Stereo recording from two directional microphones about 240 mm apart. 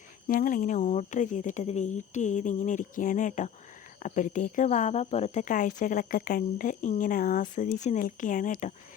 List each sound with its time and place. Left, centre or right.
0.3 s speech: left